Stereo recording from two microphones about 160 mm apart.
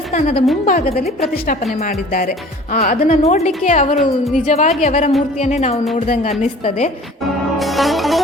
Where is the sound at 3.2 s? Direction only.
45° left (ahead or behind).